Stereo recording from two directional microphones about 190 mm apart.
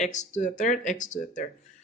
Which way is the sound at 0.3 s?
40° left (ahead or behind).